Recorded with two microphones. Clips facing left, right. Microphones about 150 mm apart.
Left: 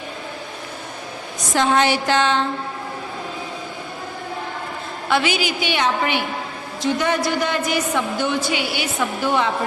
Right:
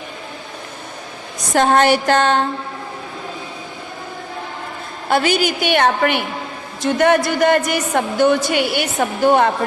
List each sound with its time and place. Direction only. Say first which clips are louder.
1.5 s a woman's voice: right 4 dB; 50° right (ahead or behind)
5.0 s a woman's voice: right 4 dB; 45° right (ahead or behind)